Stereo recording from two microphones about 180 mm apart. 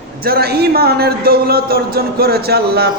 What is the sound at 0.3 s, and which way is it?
A man's voice, 60° right (ahead or behind).